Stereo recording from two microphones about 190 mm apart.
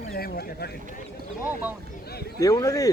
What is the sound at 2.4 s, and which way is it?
Speech, 20° left (ahead or behind).